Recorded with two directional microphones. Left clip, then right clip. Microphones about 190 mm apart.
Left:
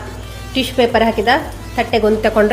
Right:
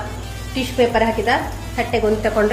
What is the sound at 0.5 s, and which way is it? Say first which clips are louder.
A woman's voice: left 3 dB; 60° left (ahead or behind).